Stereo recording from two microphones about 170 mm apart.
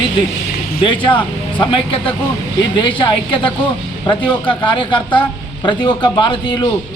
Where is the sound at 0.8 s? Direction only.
30° left (ahead or behind).